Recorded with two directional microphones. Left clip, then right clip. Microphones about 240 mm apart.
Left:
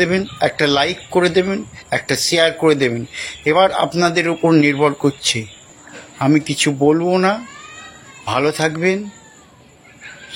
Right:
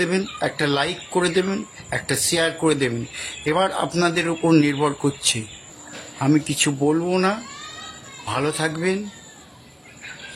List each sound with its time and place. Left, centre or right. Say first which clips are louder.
0.0 s speech: left 6 dB; centre